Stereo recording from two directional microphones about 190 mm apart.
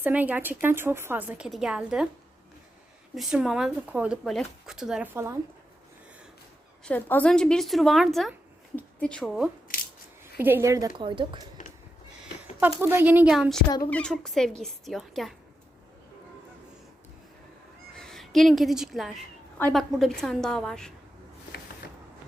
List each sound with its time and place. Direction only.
0.0 s a woman's voice: 10° right (ahead or behind)
3.2 s speech: 5° right (ahead or behind)
6.8 s speech: 10° left (ahead or behind)
9.7 s a sound: 45° left (ahead or behind)
10.3 s a woman's voice: 10° right (ahead or behind)
12.8 s a woman's voice: 10° right (ahead or behind)
13.7 s speech: 20° left (ahead or behind)
13.9 s speech: 5° left (ahead or behind)
17.9 s a woman's voice: centre (ahead or behind)